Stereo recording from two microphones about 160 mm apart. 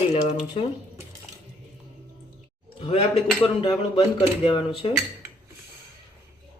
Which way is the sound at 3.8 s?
35° left (ahead or behind).